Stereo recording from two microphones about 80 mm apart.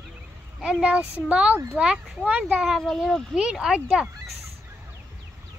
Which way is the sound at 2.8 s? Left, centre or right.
Centre.